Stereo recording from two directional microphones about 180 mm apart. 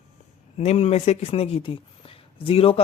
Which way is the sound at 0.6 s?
35° left (ahead or behind).